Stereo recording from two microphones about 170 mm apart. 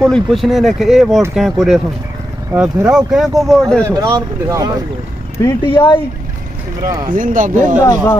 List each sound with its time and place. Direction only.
0.0 s speech: centre (ahead or behind)
3.8 s speech: 20° right (ahead or behind)
5.4 s speech: 20° left (ahead or behind)
7.1 s speech: 50° right (ahead or behind)
7.8 s speech: 20° left (ahead or behind)